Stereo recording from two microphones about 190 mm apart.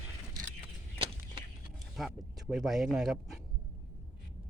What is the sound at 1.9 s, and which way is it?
Speech, centre (ahead or behind).